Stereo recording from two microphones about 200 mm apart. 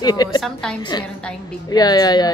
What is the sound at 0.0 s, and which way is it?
Speech, 20° left (ahead or behind).